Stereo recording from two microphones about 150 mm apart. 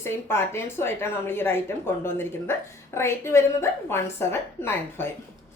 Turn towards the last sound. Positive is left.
turn(degrees=15)  # may be behind; listen again after turning